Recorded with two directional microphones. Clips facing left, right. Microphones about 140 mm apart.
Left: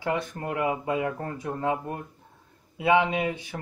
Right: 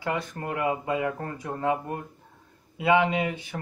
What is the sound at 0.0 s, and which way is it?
Speech, 20° left (ahead or behind).